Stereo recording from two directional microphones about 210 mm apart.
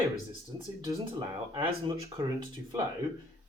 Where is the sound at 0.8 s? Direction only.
15° right (ahead or behind).